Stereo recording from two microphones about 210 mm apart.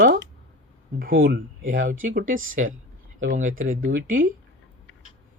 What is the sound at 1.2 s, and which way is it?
Speech, 45° right (ahead or behind).